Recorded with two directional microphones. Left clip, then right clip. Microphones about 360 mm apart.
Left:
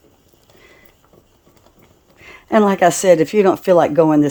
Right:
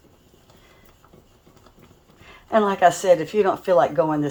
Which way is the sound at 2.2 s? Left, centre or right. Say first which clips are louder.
Left 5 dB; left.